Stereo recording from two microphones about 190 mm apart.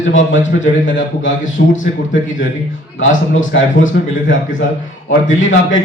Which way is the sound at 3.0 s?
90° left.